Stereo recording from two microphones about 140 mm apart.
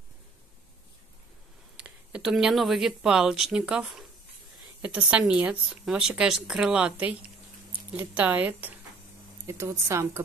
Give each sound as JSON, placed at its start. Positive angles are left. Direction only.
{"t": 1.8, "sound": "speech", "side_deg": -5}